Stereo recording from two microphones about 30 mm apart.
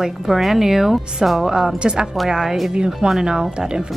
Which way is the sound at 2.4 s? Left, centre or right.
Centre.